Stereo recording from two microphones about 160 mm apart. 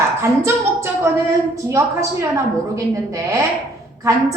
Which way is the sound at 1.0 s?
20° right (ahead or behind).